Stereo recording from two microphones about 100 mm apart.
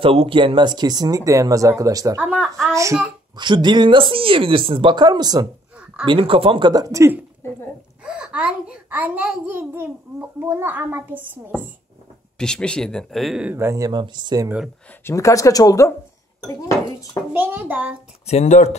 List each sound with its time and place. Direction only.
0.0 s speech: 70° right (ahead or behind); by 2.2 s 35° right (ahead or behind)
2.4 s a child's voice: 5° left (ahead or behind)
2.7 s speech: 30° right (ahead or behind)
3.3 s speech: 50° right (ahead or behind)
6.0 s speech: 60° right (ahead or behind)
6.7 s speech: 35° right (ahead or behind)
8.0 s a child's voice: 10° right (ahead or behind)
12.4 s speech: 10° left (ahead or behind)
13.6 s a child's voice: 25° right (ahead or behind)
13.8 s speech: 50° right (ahead or behind)
15.0 s speech: 30° left (ahead or behind)
17.3 s a child's voice: 20° right (ahead or behind)
18.2 s speech: 90° left